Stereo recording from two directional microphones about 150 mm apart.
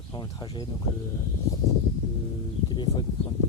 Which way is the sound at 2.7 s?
30° left (ahead or behind).